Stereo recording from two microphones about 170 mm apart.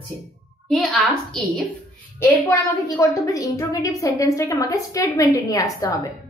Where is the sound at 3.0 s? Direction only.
20° left (ahead or behind).